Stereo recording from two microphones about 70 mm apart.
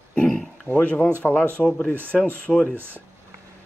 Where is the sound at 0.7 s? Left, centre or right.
Left.